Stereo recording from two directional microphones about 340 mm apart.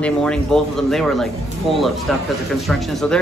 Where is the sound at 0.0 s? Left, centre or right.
Centre.